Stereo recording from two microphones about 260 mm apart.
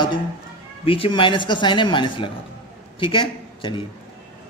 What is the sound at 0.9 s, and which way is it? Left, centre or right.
A man's voice, left.